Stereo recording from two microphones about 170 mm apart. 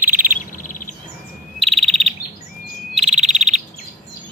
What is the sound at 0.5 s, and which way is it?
Chirp, 50° left (ahead or behind).